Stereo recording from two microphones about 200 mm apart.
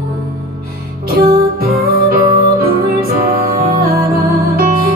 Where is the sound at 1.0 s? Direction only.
50° right (ahead or behind).